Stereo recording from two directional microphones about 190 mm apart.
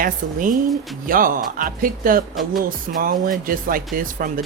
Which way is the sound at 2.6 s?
45° right (ahead or behind).